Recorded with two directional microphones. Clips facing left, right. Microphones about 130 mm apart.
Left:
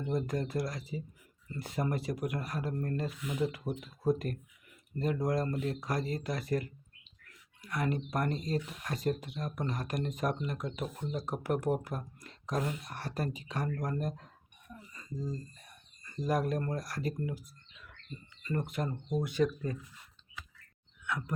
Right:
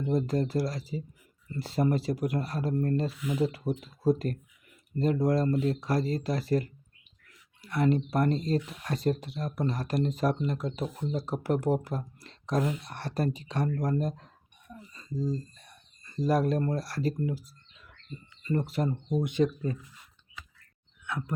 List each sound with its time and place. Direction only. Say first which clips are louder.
0.1 s speech: right 6 dB; 30° right (ahead or behind)
12.2 s a sound: right 6 dB; 35° right (ahead or behind)
13.0 s speech: right 7 dB; 35° right (ahead or behind)
14.9 s a sound: right 7 dB; 35° right (ahead or behind)
16.0 s speech: right 5 dB; 35° right (ahead or behind)
18.7 s speech: right 5 dB; 25° right (ahead or behind)
21.1 s speech: right 2 dB; 25° right (ahead or behind)